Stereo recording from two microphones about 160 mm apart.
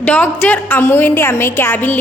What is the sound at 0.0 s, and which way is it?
A woman's voice, 10° left (ahead or behind).